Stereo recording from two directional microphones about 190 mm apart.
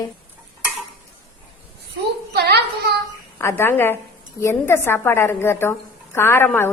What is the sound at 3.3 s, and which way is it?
Speech, 15° left (ahead or behind).